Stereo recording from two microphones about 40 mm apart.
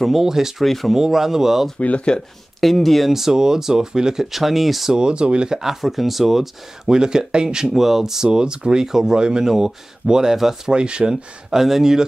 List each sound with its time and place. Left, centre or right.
0.0 s speech: centre
0.7 s speech: centre
0.9 s speech: centre
1.8 s speech: left
2.6 s speech: centre
3.1 s speech: centre
4.9 s speech: right
5.6 s speech: centre
6.9 s speech: centre
7.7 s speech: centre
10.7 s speech: right
11.5 s speech: centre